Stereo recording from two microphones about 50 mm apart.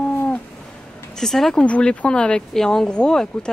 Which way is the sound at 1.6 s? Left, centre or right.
Left.